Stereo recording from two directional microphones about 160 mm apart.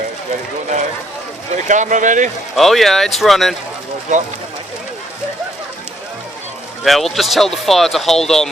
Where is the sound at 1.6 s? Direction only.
50° right (ahead or behind).